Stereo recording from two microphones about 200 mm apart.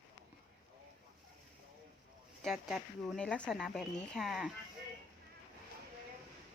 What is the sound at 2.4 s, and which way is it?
A woman's voice, centre (ahead or behind).